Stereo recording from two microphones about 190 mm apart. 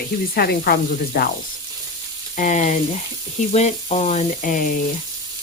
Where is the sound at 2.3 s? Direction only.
40° left (ahead or behind).